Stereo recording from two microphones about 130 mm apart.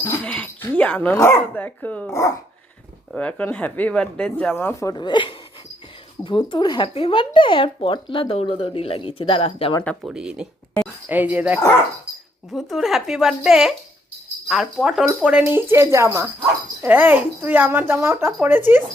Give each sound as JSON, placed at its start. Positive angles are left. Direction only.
{"t": 0.3, "sound": "dog", "side_deg": 10}
{"t": 1.1, "sound": "speech", "side_deg": 20}
{"t": 2.0, "sound": "a woman's voice", "side_deg": 20}
{"t": 3.1, "sound": "speech", "side_deg": 10}
{"t": 4.5, "sound": "a woman's voice", "side_deg": 20}
{"t": 10.0, "sound": "speech", "side_deg": -5}
{"t": 12.5, "sound": "speech", "side_deg": 0}